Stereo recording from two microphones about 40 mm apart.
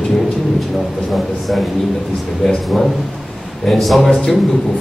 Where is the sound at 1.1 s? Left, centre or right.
Centre.